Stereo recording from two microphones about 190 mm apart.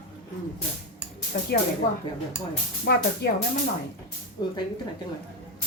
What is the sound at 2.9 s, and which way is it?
Speech, 55° left (ahead or behind).